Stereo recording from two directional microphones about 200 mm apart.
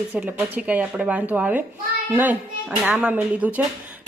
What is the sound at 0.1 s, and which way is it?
Speech, 5° right (ahead or behind).